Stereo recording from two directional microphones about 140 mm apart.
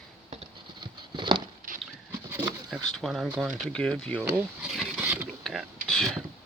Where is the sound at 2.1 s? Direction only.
15° right (ahead or behind).